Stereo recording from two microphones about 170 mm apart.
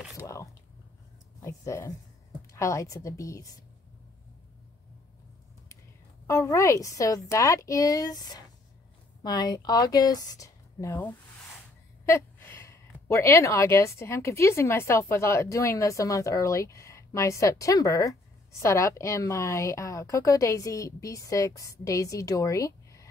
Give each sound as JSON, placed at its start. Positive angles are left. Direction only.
{"t": 1.4, "sound": "a woman's voice", "side_deg": 15}
{"t": 6.2, "sound": "a woman's voice", "side_deg": 15}